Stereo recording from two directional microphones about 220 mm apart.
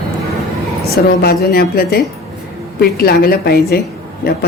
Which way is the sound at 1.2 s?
45° left (ahead or behind).